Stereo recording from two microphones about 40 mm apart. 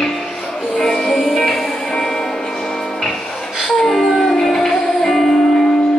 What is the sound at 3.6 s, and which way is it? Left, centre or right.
Music, centre.